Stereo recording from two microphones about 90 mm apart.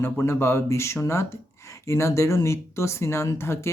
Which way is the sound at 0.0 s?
25° left (ahead or behind).